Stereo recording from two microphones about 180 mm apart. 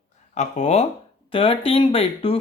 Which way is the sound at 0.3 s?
40° left (ahead or behind).